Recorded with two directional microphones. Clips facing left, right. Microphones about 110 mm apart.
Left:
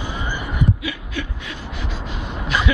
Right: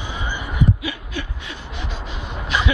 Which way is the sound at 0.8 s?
35° right (ahead or behind).